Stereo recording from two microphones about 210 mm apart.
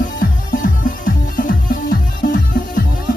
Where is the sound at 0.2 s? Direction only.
40° left (ahead or behind).